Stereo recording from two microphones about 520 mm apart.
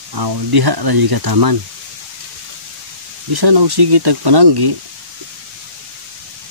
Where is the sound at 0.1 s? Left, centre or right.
Right.